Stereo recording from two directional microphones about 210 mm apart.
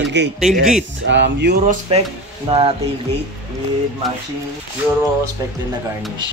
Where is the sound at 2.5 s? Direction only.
25° right (ahead or behind).